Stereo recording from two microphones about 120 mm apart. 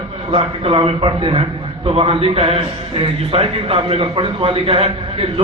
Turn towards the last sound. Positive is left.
turn(degrees=-50)  # may be behind; listen again after turning